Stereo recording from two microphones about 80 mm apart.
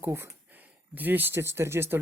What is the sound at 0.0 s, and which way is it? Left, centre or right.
Speech, right.